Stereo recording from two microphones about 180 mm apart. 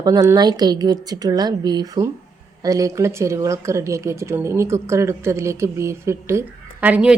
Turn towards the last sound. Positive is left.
turn(degrees=-5)  # may be behind; listen again after turning